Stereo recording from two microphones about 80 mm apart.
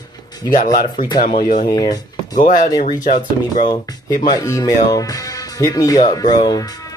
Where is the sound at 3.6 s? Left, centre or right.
Left.